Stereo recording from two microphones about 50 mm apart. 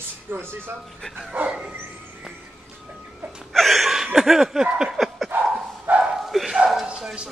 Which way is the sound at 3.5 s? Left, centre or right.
Centre.